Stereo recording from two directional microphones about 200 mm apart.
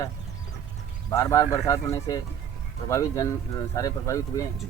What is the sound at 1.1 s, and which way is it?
Speech, 15° left (ahead or behind).